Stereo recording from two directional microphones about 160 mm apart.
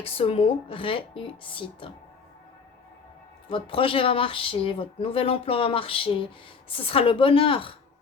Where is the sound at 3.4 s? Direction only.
35° left (ahead or behind).